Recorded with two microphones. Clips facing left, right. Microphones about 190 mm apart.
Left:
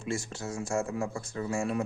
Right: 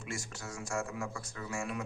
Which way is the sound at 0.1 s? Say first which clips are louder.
Left 9 dB; 25° left (ahead or behind).